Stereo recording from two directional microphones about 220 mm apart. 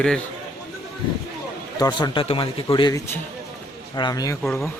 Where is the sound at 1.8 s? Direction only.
20° left (ahead or behind).